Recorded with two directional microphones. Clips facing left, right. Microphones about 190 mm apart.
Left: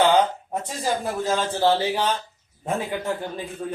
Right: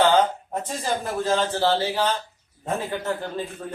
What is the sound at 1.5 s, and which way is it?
Speech, 15° left (ahead or behind).